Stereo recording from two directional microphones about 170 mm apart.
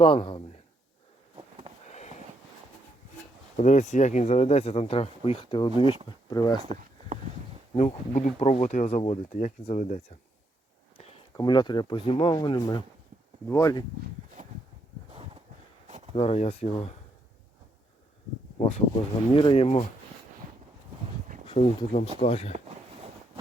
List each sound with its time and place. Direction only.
0.0 s speech: 30° left (ahead or behind)
1.9 s a sound: 40° left (ahead or behind)
3.6 s speech: 45° left (ahead or behind); by 6.6 s 25° left (ahead or behind)
6.6 s a sound: 40° right (ahead or behind)
7.8 s speech: 40° left (ahead or behind)
11.3 s speech: 25° left (ahead or behind)
14.4 s a sound: 50° right (ahead or behind)
16.1 s speech: 35° left (ahead or behind)
19.3 s speech: 30° left (ahead or behind)
21.4 s speech: 30° left (ahead or behind)